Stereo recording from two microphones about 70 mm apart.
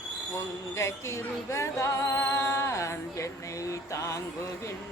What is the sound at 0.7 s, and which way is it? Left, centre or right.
Speech, left.